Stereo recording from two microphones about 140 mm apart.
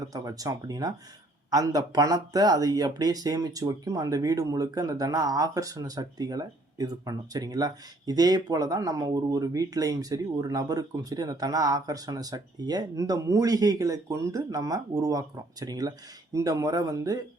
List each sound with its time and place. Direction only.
0.0 s speech: 25° right (ahead or behind)